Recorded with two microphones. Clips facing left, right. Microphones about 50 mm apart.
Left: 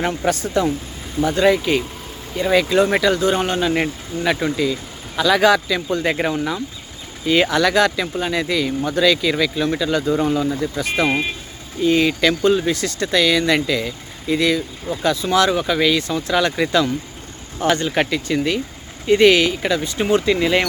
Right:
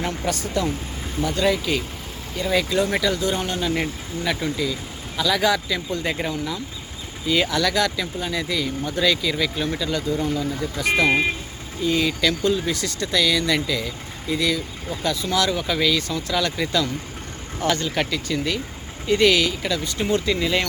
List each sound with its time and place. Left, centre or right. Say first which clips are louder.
1.2 s speech: left 6 dB; left
2.5 s speech: left 5 dB; left
7.3 s speech: left 5 dB; left
10.1 s speech: left 5 dB; left
11.8 s speech: left 5 dB; left
12.7 s speech: left 4 dB; left